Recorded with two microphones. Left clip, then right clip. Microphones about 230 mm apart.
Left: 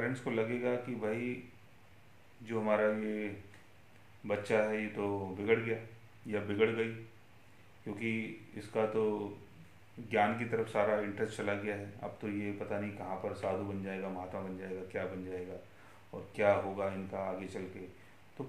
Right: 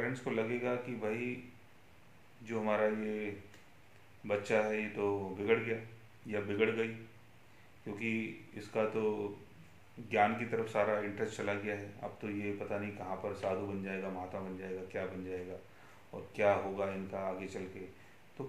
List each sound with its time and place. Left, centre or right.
0.1 s speech: centre
2.4 s speech: centre
4.3 s speech: centre
10.0 s speech: centre